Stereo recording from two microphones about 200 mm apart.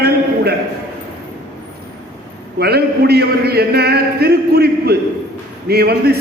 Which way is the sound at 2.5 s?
50° right (ahead or behind).